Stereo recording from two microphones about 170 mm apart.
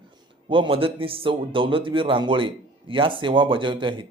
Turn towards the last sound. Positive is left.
turn(degrees=-30)  # may be behind; listen again after turning